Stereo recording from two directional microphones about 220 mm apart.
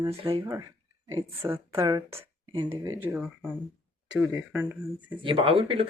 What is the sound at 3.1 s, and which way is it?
Speech, 5° right (ahead or behind).